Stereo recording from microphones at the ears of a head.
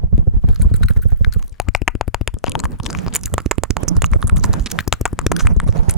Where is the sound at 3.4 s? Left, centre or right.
Right.